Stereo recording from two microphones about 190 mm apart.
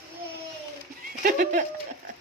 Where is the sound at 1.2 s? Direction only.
45° right (ahead or behind).